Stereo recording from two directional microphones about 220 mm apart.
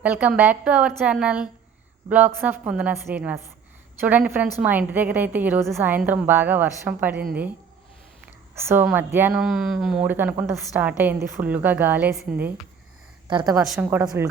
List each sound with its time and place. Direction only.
0.0 s speech: 5° right (ahead or behind)
8.5 s speech: 10° right (ahead or behind)
13.2 s a woman's voice: 20° right (ahead or behind)
13.6 s speech: 5° right (ahead or behind)